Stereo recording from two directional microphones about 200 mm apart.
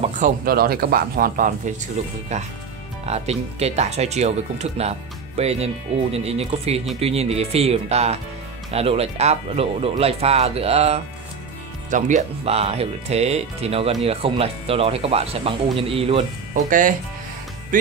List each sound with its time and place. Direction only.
0.2 s speech: 50° right (ahead or behind)
2.0 s speech: 35° right (ahead or behind)
16.6 s speech: 40° right (ahead or behind)